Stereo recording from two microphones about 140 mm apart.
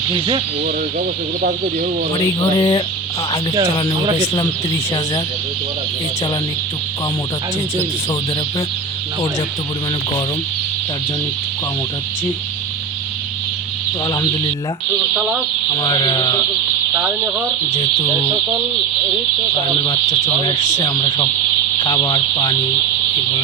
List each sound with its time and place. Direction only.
0.1 s speech: 40° right (ahead or behind)
2.1 s speech: 35° left (ahead or behind)
14.1 s speech: 30° left (ahead or behind)
15.8 s speech: 30° left (ahead or behind)
16.9 s speech: 10° right (ahead or behind)
20.7 s speech: 30° left (ahead or behind)